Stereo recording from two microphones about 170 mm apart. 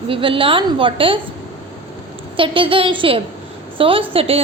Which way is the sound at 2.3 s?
30° right (ahead or behind).